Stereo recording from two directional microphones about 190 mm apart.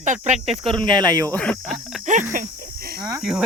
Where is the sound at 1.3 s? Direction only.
5° left (ahead or behind).